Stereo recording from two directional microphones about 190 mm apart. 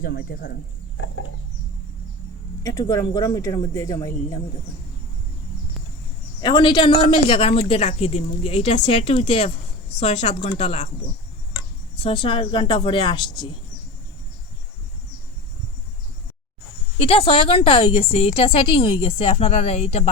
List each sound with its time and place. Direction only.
0.0 s speech: 50° left (ahead or behind)
2.6 s a woman's voice: 20° left (ahead or behind)
6.4 s a woman's voice: 25° left (ahead or behind)
11.9 s a woman's voice: 30° left (ahead or behind)
17.0 s a woman's voice: 30° left (ahead or behind)